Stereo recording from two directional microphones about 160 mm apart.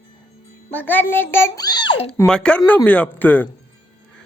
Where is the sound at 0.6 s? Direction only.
10° left (ahead or behind); by 2.1 s 30° left (ahead or behind).